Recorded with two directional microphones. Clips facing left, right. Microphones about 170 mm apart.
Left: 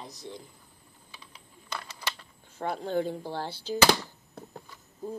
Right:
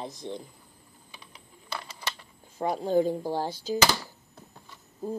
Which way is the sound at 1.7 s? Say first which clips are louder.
Right 1 dB; 10° right (ahead or behind).